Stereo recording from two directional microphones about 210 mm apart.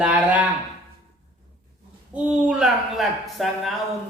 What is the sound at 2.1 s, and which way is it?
Speech, 5° right (ahead or behind).